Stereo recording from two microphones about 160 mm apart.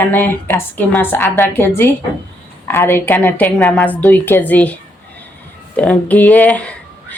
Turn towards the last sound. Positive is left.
turn(degrees=5)  # may be behind; listen again after turning